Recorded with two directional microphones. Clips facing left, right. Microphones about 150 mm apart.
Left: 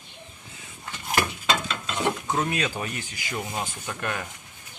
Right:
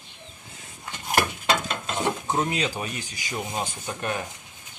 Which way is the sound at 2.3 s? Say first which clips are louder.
Right 1 dB; 20° right (ahead or behind).